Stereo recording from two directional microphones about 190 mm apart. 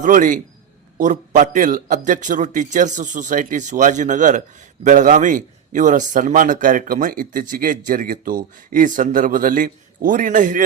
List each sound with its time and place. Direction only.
0.0 s a man's voice: 45° right (ahead or behind)